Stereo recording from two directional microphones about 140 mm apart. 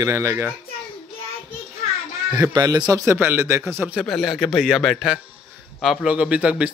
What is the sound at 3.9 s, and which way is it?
A man's voice, centre (ahead or behind).